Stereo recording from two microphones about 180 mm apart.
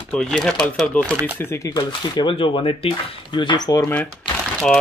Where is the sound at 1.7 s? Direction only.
25° left (ahead or behind).